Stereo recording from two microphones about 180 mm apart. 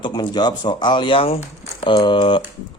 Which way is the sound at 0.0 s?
25° left (ahead or behind).